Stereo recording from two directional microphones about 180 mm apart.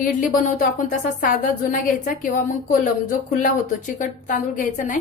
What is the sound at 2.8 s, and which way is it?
A woman's voice, 45° left (ahead or behind).